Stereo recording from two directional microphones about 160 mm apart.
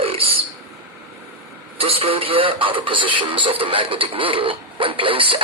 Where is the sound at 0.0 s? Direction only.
35° right (ahead or behind).